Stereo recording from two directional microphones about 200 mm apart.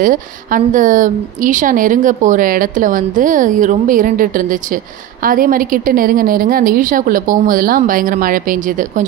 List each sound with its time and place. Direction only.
0.0 s a woman's voice: 45° right (ahead or behind)